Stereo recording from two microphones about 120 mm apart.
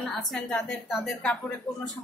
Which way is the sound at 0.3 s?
5° left (ahead or behind).